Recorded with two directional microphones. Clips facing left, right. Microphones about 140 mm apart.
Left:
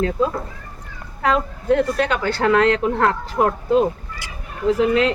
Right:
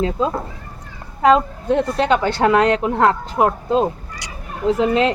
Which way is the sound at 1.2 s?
20° right (ahead or behind).